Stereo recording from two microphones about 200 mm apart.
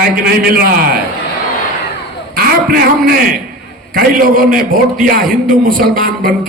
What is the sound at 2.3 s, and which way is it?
A man's voice, 50° right (ahead or behind).